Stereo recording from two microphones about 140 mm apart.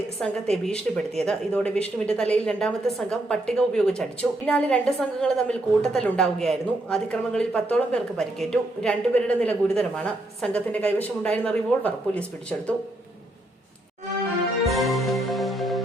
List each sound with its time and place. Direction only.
0.2 s speech: 5° left (ahead or behind)
14.7 s music: centre (ahead or behind)